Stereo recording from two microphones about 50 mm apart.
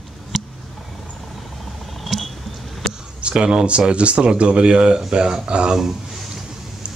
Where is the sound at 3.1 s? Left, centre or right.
Centre.